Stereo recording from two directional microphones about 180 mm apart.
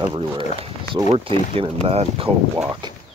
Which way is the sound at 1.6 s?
35° right (ahead or behind).